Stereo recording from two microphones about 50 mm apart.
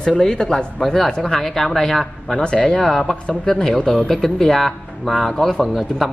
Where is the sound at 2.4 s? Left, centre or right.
Left.